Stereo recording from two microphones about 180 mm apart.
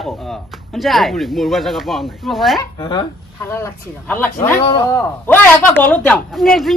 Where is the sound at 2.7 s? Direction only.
25° left (ahead or behind).